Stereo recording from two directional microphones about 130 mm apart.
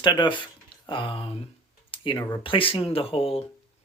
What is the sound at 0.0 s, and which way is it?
Speech, 35° left (ahead or behind).